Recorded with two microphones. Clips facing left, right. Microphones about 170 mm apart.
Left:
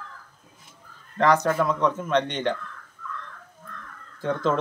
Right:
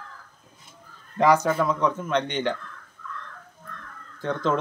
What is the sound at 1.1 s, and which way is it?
Speech, 5° right (ahead or behind).